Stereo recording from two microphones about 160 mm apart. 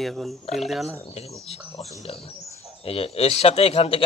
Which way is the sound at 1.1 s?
40° left (ahead or behind).